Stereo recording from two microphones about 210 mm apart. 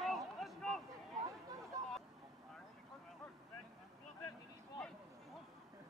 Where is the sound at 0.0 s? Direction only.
Centre (ahead or behind).